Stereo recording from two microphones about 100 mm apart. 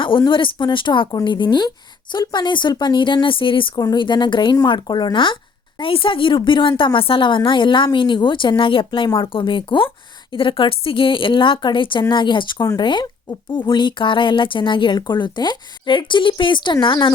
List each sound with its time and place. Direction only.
0.3 s a woman's voice: 55° left (ahead or behind)
3.8 s a woman's voice: 45° left (ahead or behind)